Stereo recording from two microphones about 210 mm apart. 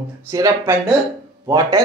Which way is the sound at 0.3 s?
15° right (ahead or behind).